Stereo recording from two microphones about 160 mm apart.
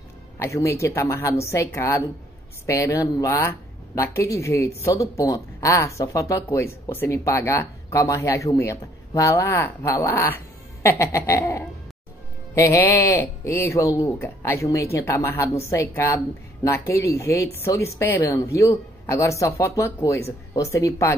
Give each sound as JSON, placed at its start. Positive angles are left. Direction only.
{"t": 0.4, "sound": "a woman's voice", "side_deg": 15}